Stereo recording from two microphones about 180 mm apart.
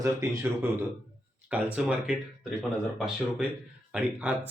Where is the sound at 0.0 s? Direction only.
15° right (ahead or behind).